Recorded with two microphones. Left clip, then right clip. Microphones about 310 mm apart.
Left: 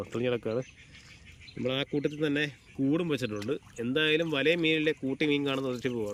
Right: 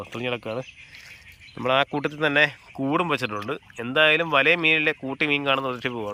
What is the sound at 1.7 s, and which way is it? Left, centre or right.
Speech, centre.